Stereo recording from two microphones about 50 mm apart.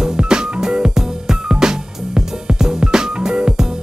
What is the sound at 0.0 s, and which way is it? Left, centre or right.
Music, centre.